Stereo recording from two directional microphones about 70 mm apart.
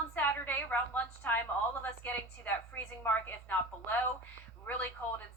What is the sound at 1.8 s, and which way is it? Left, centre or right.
A woman's voice, left.